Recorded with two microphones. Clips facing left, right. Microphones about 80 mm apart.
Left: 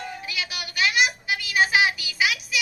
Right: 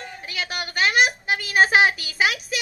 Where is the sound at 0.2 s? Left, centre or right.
Right.